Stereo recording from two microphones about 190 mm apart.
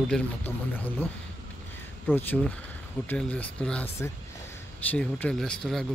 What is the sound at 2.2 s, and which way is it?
Speech, 10° left (ahead or behind).